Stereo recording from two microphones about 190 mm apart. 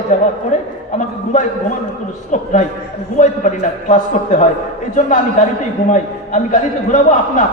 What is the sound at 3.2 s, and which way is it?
A man's voice, 40° left (ahead or behind).